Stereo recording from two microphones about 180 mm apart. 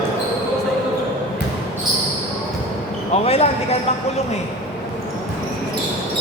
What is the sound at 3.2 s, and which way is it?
Speech, 35° left (ahead or behind).